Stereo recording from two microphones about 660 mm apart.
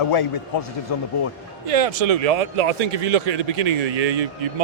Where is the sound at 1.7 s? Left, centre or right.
Right.